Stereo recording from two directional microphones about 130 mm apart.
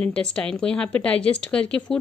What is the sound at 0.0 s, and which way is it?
Speech, 5° left (ahead or behind).